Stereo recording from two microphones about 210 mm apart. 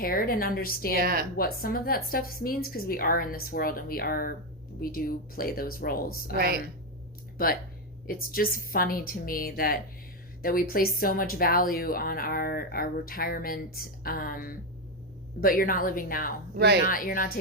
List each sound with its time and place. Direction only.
0.0 s speech: 45° left (ahead or behind)
0.9 s speech: 45° right (ahead or behind)
1.4 s speech: 45° left (ahead or behind)
6.3 s speech: 45° right (ahead or behind)
8.0 s speech: 45° left (ahead or behind)